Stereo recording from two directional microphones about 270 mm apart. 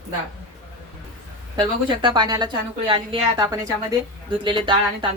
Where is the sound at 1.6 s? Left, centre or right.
Centre.